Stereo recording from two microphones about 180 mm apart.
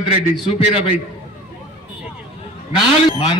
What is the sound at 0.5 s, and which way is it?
Speech, 35° left (ahead or behind).